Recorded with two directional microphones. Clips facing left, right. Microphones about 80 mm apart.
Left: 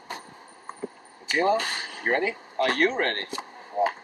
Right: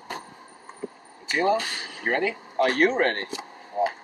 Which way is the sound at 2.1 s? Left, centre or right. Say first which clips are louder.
Even; left.